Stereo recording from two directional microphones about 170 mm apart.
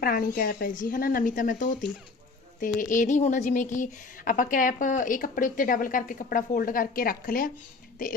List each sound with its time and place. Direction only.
0.0 s a woman's voice: 55° left (ahead or behind)